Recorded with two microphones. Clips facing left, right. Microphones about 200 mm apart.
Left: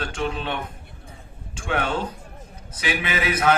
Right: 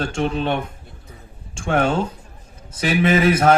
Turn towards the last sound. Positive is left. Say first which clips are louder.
# right 9 dB
turn(degrees=-45)  # may be behind; listen again after turning